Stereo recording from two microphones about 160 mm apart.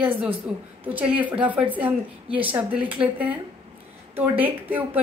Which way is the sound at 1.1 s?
10° right (ahead or behind).